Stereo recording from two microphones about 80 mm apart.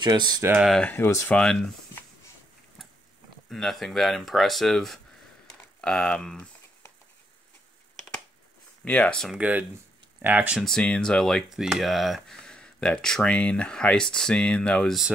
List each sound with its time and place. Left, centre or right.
0.0 s speech: right
0.8 s speech: left
1.3 s speech: centre
3.4 s speech: centre
8.8 s speech: centre
9.4 s speech: centre
10.6 s speech: centre
11.5 s speech: centre